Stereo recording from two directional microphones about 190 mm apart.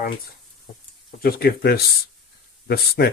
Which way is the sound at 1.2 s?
55° left (ahead or behind).